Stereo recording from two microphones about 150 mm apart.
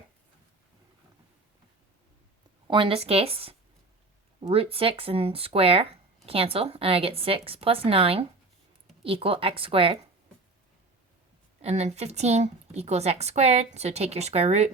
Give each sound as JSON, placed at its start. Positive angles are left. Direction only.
{"t": 2.6, "sound": "speech", "side_deg": -35}
{"t": 11.6, "sound": "a woman's voice", "side_deg": -45}